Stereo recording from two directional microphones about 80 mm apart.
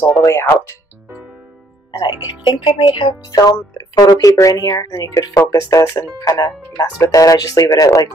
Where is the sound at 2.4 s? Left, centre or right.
Left.